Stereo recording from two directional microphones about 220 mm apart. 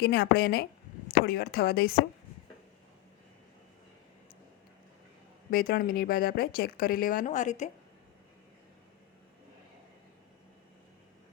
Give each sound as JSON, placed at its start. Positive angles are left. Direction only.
{"t": 0.0, "sound": "speech", "side_deg": 45}
{"t": 5.5, "sound": "speech", "side_deg": 40}